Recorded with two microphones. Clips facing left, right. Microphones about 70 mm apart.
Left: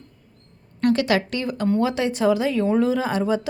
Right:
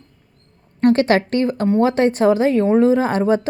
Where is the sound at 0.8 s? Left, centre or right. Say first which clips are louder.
Right 5 dB; right.